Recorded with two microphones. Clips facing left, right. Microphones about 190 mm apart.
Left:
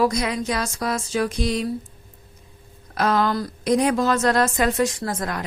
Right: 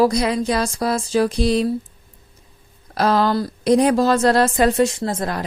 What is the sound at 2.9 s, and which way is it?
A woman's voice, 35° right (ahead or behind).